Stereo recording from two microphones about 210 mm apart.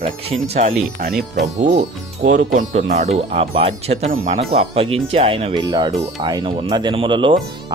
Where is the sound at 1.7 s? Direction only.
35° right (ahead or behind).